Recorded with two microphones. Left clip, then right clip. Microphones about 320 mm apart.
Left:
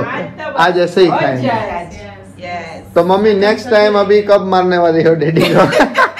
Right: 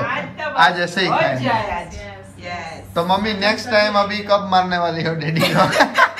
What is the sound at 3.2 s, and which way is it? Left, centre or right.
A man's voice, centre.